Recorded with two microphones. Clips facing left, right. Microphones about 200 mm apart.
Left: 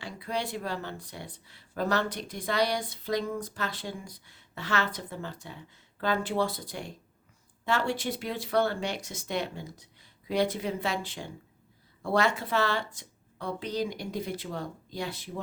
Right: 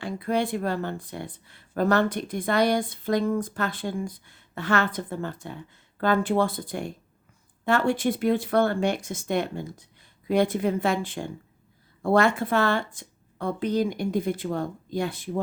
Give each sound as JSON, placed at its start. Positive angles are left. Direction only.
{"t": 0.0, "sound": "speech", "side_deg": -55}